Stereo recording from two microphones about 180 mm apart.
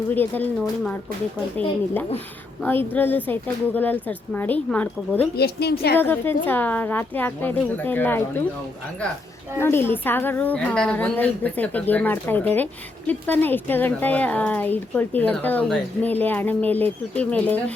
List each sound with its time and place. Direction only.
0.1 s a woman's voice: 10° left (ahead or behind)
1.5 s a woman's voice: 10° left (ahead or behind)
5.4 s a woman's voice: 60° left (ahead or behind)
6.0 s a woman's voice: 10° left (ahead or behind)
9.6 s a woman's voice: 15° left (ahead or behind)